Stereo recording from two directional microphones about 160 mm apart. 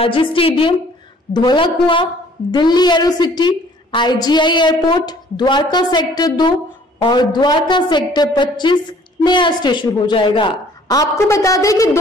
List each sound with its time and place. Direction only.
0.0 s a woman's voice: 35° left (ahead or behind)